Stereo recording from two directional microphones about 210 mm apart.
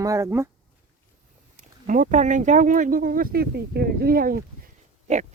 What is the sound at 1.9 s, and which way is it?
Speech, 35° right (ahead or behind).